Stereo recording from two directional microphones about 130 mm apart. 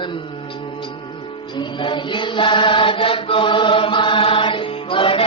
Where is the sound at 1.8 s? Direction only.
40° left (ahead or behind).